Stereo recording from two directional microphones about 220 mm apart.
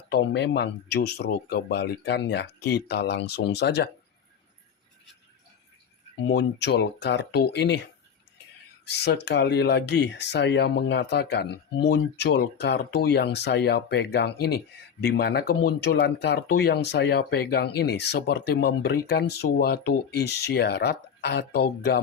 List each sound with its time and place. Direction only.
0.1 s speech: 50° left (ahead or behind)
6.2 s speech: 50° left (ahead or behind)
8.8 s speech: 50° left (ahead or behind)